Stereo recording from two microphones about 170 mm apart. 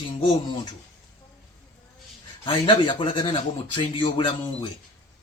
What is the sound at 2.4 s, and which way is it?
Speech, 30° left (ahead or behind).